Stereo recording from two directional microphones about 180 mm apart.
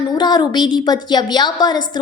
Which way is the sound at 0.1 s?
25° left (ahead or behind).